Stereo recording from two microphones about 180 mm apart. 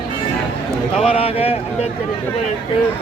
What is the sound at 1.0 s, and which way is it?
Speech, 30° left (ahead or behind).